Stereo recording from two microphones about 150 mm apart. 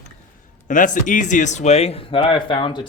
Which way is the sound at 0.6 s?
60° left (ahead or behind).